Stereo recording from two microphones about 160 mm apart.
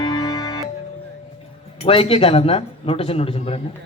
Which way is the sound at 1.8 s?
35° left (ahead or behind).